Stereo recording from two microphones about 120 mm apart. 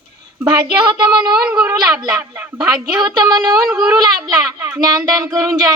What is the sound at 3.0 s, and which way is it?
Speech, 35° right (ahead or behind).